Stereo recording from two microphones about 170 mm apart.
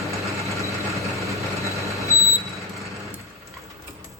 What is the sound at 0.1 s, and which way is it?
Vehicle, 15° right (ahead or behind).